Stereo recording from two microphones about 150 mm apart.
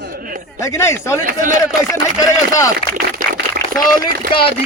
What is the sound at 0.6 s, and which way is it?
Speech, 20° left (ahead or behind).